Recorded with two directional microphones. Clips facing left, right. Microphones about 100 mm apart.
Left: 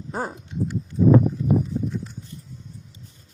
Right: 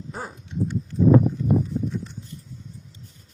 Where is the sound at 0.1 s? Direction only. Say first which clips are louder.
Left 7 dB; 45° left (ahead or behind).